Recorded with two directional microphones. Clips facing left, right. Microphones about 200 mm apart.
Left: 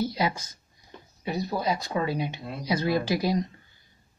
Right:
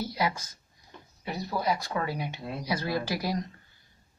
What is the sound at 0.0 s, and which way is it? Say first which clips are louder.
Speech: left 3 dB; 20° left (ahead or behind).